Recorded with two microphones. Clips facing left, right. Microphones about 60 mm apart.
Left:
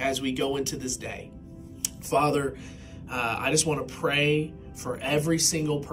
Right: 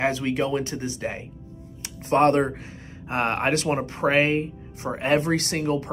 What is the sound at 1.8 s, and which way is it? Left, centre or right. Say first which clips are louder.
Music: right 5 dB; right.